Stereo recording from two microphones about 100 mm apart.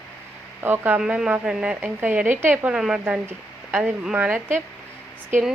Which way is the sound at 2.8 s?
10° right (ahead or behind).